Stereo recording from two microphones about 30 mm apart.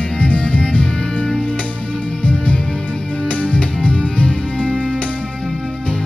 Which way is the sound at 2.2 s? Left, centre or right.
Left.